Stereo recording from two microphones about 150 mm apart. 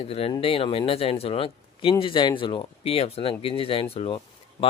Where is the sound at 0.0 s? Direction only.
40° left (ahead or behind).